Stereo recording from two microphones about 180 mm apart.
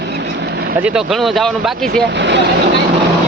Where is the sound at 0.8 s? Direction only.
5° right (ahead or behind).